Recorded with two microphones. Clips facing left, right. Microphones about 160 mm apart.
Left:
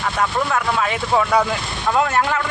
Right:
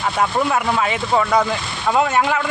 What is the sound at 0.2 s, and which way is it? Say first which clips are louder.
Speech: right 2 dB; 10° right (ahead or behind).